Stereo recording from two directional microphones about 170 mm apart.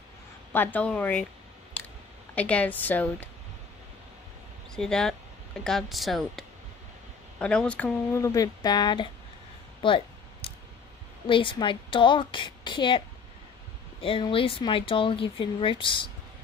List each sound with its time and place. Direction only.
0.5 s speech: 10° left (ahead or behind)
2.3 s speech: 10° left (ahead or behind)
4.7 s speech: 5° left (ahead or behind); by 9.1 s 25° left (ahead or behind)
9.8 s a sound: 30° left (ahead or behind)
11.2 s a woman's voice: 30° left (ahead or behind)
14.0 s speech: 30° left (ahead or behind)